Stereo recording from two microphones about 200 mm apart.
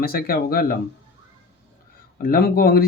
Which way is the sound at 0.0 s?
50° left (ahead or behind).